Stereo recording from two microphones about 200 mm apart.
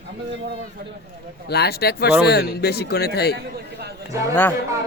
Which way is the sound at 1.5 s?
55° left (ahead or behind).